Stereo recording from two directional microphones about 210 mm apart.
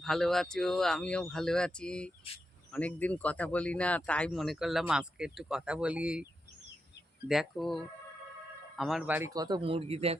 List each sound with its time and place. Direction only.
0.0 s speech: centre (ahead or behind)
7.3 s speech: centre (ahead or behind); by 10.2 s 30° right (ahead or behind)